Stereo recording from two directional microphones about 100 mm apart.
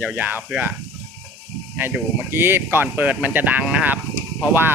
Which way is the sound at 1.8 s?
25° right (ahead or behind).